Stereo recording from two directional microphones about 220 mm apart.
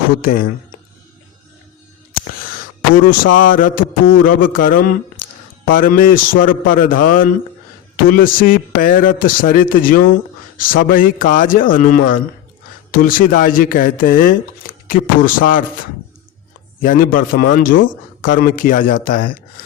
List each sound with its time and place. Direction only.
0.1 s speech: 40° left (ahead or behind)
2.9 s speech: 40° left (ahead or behind)
16.8 s speech: 40° left (ahead or behind)